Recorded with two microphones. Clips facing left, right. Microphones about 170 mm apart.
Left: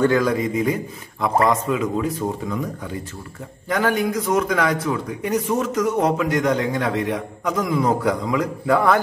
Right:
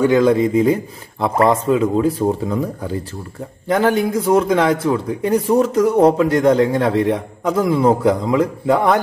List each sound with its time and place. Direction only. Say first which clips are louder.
0.2 s a man's voice: right 7 dB; 30° right (ahead or behind)